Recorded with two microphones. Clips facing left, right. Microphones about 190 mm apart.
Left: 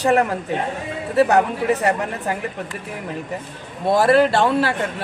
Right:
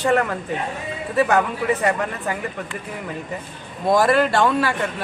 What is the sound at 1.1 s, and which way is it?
Speech, 35° left (ahead or behind).